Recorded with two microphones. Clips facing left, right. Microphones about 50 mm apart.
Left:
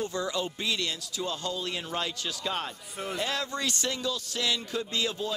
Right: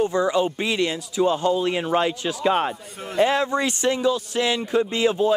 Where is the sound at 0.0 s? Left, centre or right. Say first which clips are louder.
Right 11 dB; right.